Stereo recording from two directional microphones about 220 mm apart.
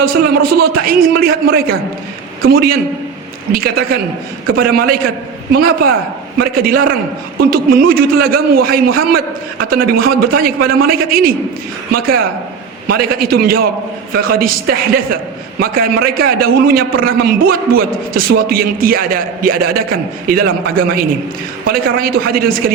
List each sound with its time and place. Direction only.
0.6 s a man's voice: 40° right (ahead or behind)